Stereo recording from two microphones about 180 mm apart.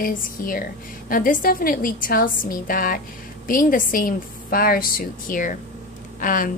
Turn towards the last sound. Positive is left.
turn(degrees=50)  # may be behind; listen again after turning